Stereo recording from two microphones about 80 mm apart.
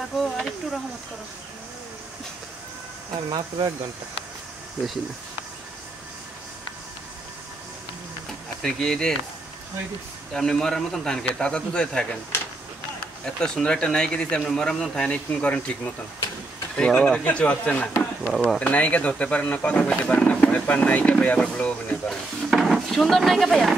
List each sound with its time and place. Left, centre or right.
0.2 s speech: centre
3.3 s speech: right
8.6 s speech: centre
10.3 s speech: centre
13.2 s speech: centre
18.2 s speech: centre
18.6 s speech: centre
22.5 s speech: centre